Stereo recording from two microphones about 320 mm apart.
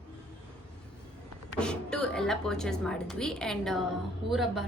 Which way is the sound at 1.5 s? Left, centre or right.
Centre.